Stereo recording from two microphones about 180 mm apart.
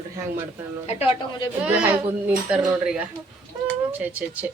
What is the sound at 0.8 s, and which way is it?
Speech, 35° left (ahead or behind).